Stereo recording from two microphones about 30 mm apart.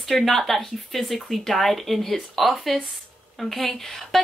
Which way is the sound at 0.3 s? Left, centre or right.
Centre.